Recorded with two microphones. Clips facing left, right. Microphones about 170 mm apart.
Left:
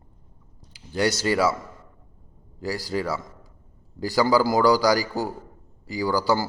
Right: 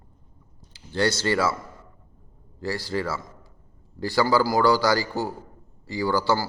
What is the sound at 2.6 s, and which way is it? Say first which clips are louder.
Speech: even; 15° left (ahead or behind).